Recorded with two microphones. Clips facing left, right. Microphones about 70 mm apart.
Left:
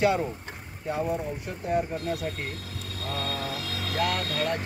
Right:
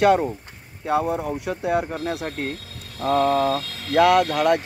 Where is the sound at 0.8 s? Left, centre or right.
Right.